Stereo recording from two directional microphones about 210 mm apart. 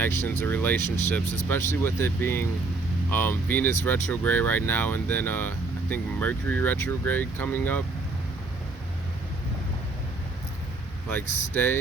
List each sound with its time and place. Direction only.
0.0 s speech: 10° left (ahead or behind)
11.1 s speech: 10° left (ahead or behind)